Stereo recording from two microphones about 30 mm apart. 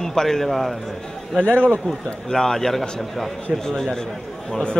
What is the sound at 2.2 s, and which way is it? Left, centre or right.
A man's voice, centre.